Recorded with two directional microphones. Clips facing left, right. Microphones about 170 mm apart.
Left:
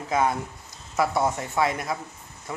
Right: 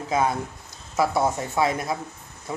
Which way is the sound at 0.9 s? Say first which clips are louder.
Right 1 dB; 5° right (ahead or behind).